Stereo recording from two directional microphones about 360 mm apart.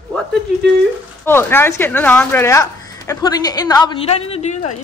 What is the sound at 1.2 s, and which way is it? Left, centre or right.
Speech, centre.